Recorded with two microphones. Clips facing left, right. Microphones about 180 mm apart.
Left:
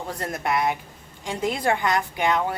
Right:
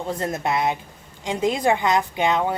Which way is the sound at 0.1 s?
25° right (ahead or behind).